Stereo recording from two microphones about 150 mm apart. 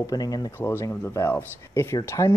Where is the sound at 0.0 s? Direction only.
25° left (ahead or behind).